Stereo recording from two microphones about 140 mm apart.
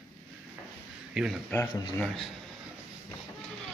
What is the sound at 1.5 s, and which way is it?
Speech, 15° left (ahead or behind).